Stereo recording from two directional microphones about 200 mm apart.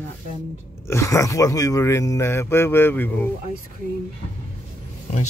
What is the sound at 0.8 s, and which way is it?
Speech, 15° left (ahead or behind).